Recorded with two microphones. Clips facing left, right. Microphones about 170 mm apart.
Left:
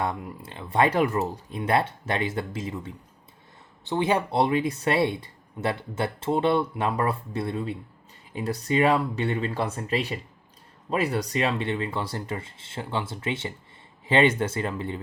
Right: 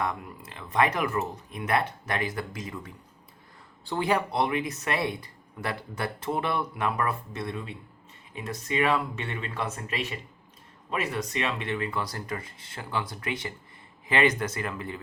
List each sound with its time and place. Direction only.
0.0 s speech: 30° left (ahead or behind)